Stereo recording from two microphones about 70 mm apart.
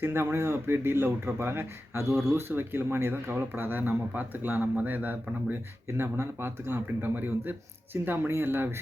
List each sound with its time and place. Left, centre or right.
0.0 s speech: right
2.5 s speech: right